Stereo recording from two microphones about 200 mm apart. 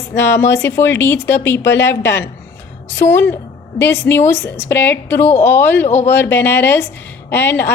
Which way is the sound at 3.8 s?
60° left (ahead or behind).